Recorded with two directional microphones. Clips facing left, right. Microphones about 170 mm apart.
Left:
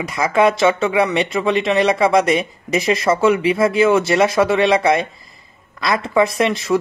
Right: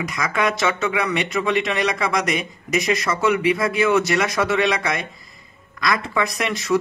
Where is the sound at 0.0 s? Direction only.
30° left (ahead or behind).